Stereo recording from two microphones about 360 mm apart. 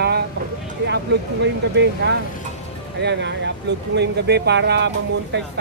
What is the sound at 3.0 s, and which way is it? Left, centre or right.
Speech, right.